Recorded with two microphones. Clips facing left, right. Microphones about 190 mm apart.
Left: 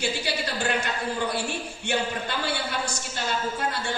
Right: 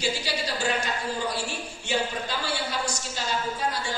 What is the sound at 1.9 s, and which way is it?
A man's voice, 60° left (ahead or behind).